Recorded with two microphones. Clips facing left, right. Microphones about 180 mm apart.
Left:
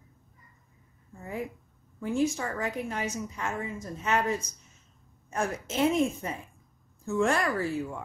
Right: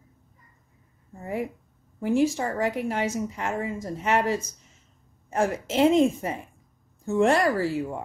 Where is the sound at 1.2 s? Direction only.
75° right (ahead or behind).